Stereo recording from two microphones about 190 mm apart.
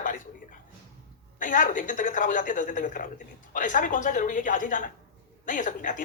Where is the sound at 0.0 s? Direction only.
45° left (ahead or behind).